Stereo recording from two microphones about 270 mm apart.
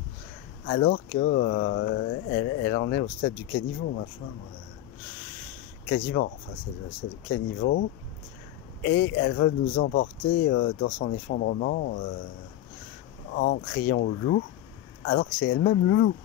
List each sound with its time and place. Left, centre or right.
0.7 s speech: left
5.9 s speech: left
8.8 s speech: left
13.3 s speech: left